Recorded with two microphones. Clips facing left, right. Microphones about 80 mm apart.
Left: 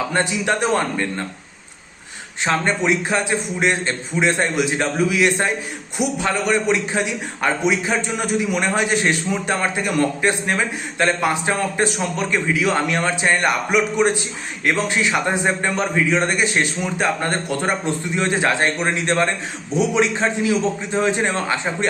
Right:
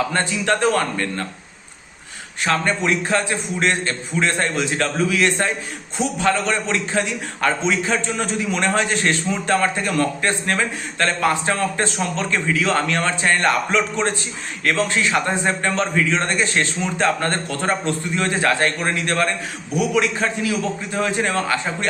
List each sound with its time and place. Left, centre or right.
0.1 s a man's voice: centre
2.4 s a man's voice: left